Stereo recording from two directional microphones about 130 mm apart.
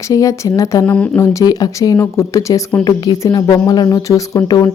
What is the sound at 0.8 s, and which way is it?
Speech, 10° left (ahead or behind).